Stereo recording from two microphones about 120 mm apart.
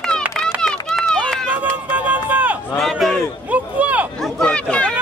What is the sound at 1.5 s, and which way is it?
Run, 10° right (ahead or behind).